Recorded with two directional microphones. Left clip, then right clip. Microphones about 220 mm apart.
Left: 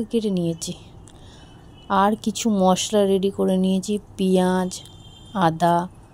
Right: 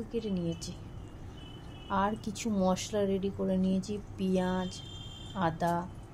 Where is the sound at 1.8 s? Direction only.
40° left (ahead or behind).